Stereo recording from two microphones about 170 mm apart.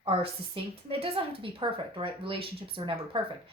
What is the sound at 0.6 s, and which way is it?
Speech, 30° right (ahead or behind).